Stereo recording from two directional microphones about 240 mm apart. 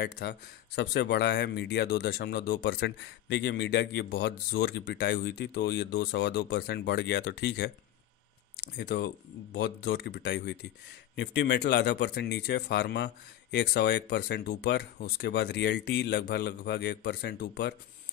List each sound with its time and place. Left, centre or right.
0.0 s speech: left
8.7 s speech: left